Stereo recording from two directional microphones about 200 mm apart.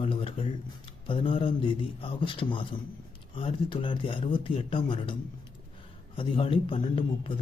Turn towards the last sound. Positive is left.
turn(degrees=25)  # may be behind; listen again after turning